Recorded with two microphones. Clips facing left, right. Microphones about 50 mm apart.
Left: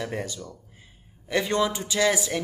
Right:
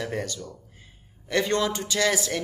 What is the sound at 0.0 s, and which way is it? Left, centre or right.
Speech, centre.